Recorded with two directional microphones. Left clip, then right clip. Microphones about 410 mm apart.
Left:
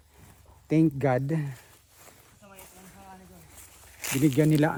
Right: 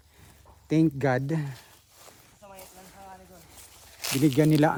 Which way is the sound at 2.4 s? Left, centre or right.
Centre.